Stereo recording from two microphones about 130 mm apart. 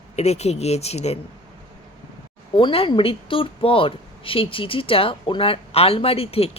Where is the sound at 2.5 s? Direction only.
40° left (ahead or behind).